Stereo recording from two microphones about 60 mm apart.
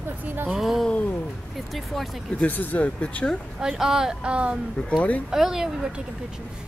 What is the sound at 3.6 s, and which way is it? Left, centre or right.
Speech, centre.